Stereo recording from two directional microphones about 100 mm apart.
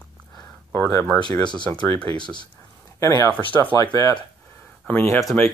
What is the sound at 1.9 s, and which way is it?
Speech, 60° right (ahead or behind).